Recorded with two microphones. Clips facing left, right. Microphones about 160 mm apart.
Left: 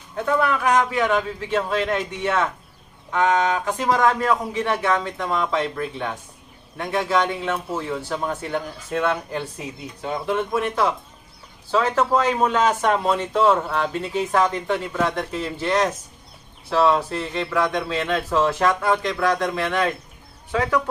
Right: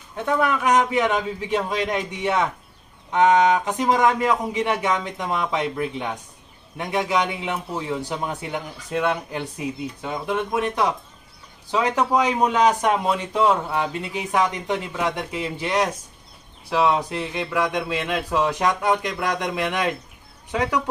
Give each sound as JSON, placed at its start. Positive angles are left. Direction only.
{"t": 0.4, "sound": "speech", "side_deg": -20}
{"t": 10.5, "sound": "speech", "side_deg": -15}